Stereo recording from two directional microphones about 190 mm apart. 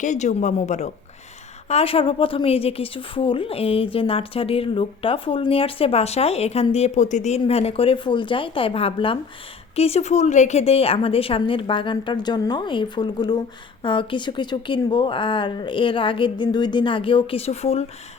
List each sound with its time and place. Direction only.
0.0 s a woman's voice: 40° left (ahead or behind)